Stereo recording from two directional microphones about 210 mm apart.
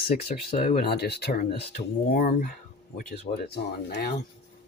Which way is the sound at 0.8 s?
50° left (ahead or behind).